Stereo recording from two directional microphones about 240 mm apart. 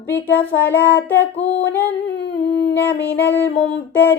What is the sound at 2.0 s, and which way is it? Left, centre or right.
Humming, left.